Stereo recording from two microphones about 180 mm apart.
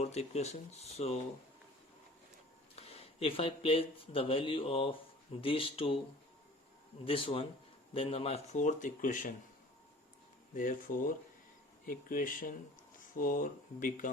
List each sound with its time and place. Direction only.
0.0 s speech: 35° left (ahead or behind)
2.7 s speech: 35° left (ahead or behind)
7.0 s speech: 30° left (ahead or behind); by 9.3 s 45° left (ahead or behind)
10.5 s speech: 50° left (ahead or behind)